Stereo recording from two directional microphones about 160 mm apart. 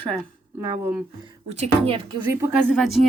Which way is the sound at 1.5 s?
40° right (ahead or behind).